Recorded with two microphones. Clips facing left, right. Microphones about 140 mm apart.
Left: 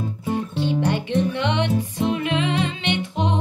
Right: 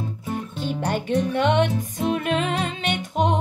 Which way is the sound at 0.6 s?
45° right (ahead or behind).